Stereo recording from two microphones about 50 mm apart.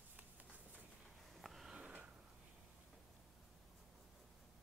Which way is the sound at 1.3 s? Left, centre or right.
Centre.